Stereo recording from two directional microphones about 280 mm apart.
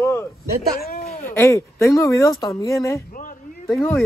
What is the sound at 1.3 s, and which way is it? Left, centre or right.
Speech, centre.